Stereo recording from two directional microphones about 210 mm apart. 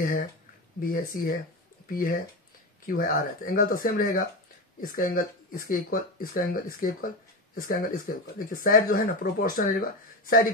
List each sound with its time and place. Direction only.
0.7 s speech: 45° left (ahead or behind)